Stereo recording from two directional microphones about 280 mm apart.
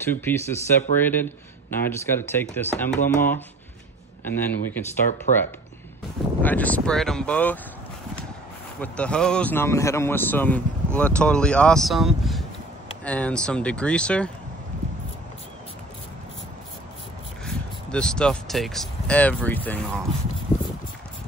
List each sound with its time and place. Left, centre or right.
0.0 s a man's voice: centre
5.3 s speech: left
6.4 s speech: centre
8.8 s speech: centre
17.5 s speech: centre